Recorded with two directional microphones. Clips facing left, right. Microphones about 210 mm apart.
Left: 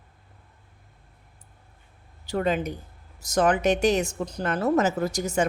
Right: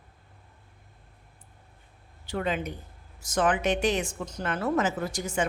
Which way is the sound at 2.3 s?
40° left (ahead or behind).